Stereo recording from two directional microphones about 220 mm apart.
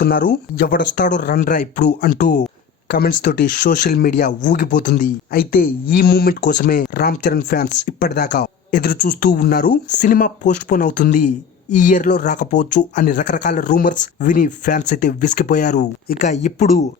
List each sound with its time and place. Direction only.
0.0 s speech: 40° left (ahead or behind)